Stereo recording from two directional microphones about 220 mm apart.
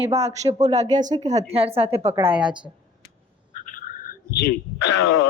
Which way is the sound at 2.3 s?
5° right (ahead or behind).